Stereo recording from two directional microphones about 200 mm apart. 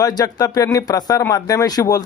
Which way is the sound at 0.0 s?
20° left (ahead or behind).